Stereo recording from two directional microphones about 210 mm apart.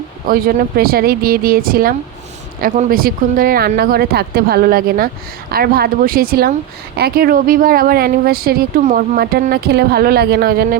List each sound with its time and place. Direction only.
0.3 s speech: 45° right (ahead or behind)